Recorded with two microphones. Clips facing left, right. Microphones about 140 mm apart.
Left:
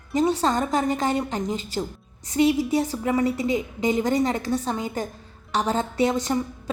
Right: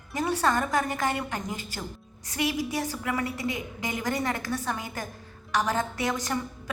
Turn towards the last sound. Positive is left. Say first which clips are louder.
# left 7 dB
turn(degrees=25)  # may be behind; listen again after turning